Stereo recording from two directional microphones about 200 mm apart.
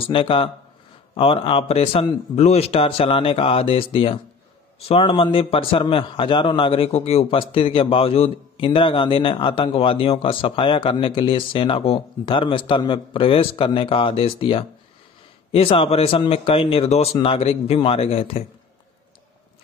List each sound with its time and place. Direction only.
0.0 s a man's voice: 25° left (ahead or behind)